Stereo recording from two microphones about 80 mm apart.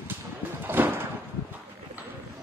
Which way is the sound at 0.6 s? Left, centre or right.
Right.